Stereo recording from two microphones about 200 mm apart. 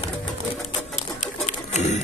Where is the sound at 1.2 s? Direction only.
35° left (ahead or behind).